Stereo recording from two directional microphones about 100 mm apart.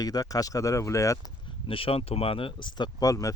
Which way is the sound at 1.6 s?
65° left (ahead or behind).